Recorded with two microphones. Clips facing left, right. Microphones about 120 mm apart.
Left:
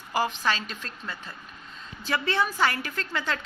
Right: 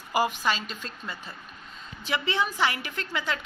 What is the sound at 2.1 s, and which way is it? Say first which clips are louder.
Speech: left 1 dB; 15° right (ahead or behind).